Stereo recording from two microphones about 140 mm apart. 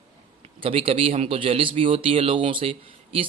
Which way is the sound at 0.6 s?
40° right (ahead or behind).